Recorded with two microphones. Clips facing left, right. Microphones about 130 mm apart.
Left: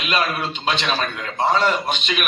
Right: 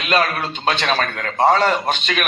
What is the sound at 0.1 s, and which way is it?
A man's voice, 40° right (ahead or behind).